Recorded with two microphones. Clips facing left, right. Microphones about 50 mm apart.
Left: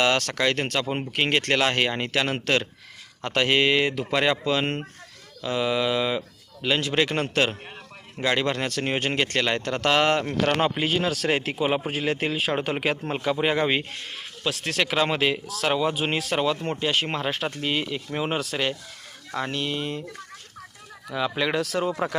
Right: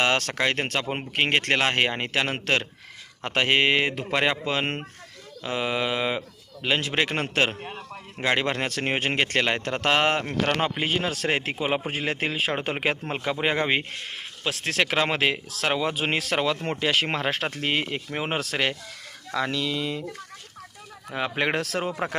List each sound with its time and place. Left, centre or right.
0.0 s speech: right
9.0 s a man's voice: right
16.8 s speech: right
18.1 s speech: right
18.3 s speech: right
19.3 s speech: right
21.1 s a man's voice: right